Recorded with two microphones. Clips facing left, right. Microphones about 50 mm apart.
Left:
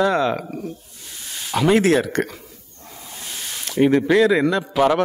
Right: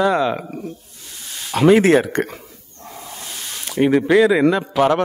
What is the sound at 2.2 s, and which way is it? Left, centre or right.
Speech, centre.